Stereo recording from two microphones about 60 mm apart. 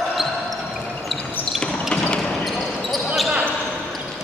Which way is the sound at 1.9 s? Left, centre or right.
Left.